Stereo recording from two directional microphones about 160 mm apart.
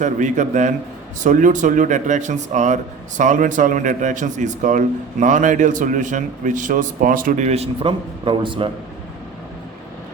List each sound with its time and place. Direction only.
0.0 s a man's voice: 50° right (ahead or behind); by 8.7 s 30° right (ahead or behind)